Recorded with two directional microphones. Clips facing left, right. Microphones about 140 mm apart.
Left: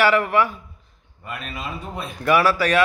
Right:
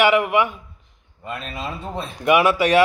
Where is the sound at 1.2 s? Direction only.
25° right (ahead or behind).